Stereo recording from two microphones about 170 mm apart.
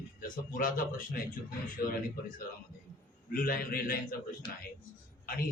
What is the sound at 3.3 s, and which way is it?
Speech, 60° left (ahead or behind).